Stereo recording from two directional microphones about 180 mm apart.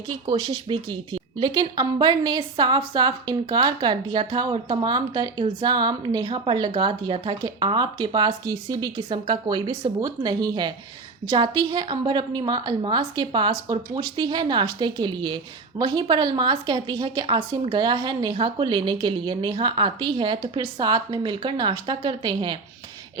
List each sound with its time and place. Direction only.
0.3 s a woman's voice: 25° right (ahead or behind)